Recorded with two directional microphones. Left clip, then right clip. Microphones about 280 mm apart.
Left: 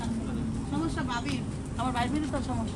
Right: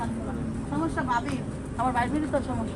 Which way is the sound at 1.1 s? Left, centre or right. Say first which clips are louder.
Right 5 dB; centre.